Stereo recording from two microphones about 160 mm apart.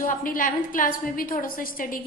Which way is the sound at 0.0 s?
60° left (ahead or behind).